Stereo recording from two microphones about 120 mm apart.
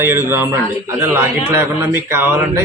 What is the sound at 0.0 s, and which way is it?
A man's voice, 20° right (ahead or behind).